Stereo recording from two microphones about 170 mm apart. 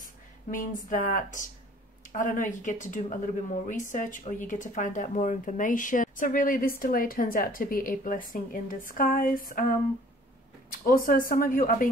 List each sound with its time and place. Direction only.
0.0 s speech: 50° left (ahead or behind)
10.7 s speech: 55° left (ahead or behind)